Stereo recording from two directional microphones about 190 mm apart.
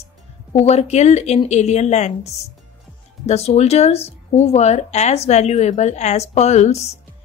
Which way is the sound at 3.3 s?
35° left (ahead or behind).